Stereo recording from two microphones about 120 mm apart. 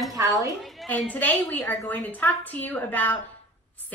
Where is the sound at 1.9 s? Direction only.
15° left (ahead or behind).